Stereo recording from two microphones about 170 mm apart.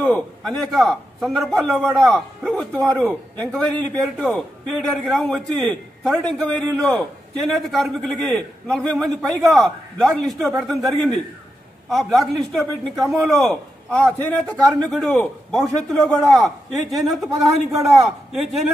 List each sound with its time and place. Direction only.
0.0 s a man's voice: 5° left (ahead or behind)